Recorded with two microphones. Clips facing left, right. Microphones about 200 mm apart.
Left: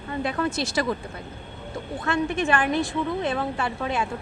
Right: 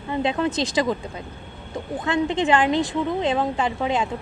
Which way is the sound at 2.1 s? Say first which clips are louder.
Right 3 dB; 20° right (ahead or behind).